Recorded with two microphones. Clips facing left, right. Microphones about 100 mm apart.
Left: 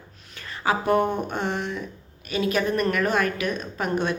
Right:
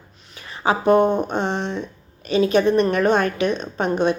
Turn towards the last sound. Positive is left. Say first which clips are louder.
# right 5 dB
turn(degrees=-20)  # may be behind; listen again after turning